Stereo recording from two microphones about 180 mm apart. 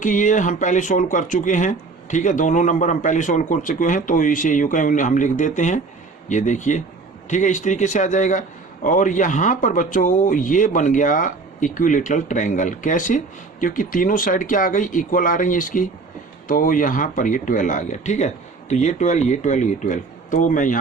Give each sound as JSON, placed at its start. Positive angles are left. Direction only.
{"t": 0.0, "sound": "a man's voice", "side_deg": 45}